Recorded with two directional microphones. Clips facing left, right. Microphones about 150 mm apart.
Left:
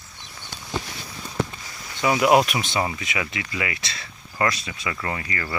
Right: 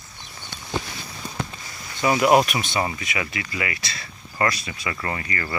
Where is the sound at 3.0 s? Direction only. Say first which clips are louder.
Even; 20° left (ahead or behind).